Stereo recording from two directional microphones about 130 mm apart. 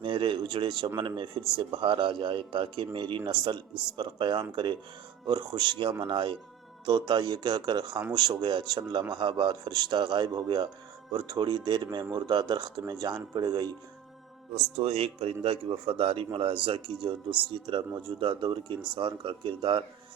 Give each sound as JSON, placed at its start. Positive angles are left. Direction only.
{"t": 0.0, "sound": "a man's voice", "side_deg": -40}
{"t": 14.5, "sound": "a man's voice", "side_deg": -50}